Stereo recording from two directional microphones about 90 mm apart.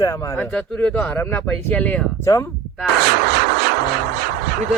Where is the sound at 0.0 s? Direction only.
35° left (ahead or behind).